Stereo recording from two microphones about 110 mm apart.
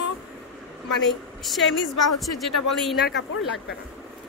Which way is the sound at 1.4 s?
Centre (ahead or behind).